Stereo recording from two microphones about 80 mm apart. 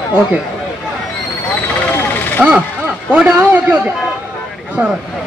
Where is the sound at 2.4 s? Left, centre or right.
Centre.